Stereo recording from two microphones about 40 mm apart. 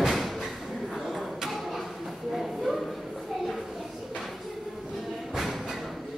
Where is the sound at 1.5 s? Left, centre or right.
Centre.